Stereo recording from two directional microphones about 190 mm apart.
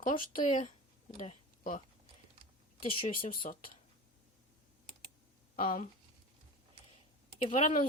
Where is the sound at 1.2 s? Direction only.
45° left (ahead or behind).